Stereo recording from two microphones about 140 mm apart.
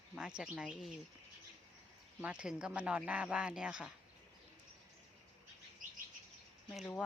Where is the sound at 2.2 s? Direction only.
5° right (ahead or behind).